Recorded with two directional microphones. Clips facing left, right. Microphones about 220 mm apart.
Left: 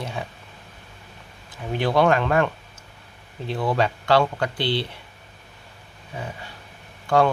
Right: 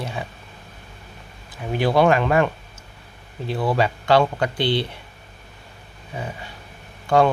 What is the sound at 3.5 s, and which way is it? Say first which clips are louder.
Speech: right 1 dB; 5° right (ahead or behind).